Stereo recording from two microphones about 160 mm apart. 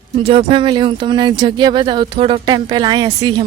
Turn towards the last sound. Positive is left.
turn(degrees=-30)  # may be behind; listen again after turning